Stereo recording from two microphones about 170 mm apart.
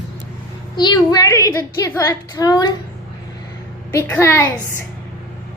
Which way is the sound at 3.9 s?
15° left (ahead or behind).